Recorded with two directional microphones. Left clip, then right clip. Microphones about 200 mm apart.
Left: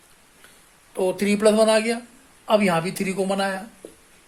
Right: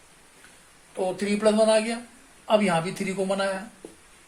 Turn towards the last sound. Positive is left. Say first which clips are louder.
# left 2 dB
turn(degrees=45)  # may be behind; listen again after turning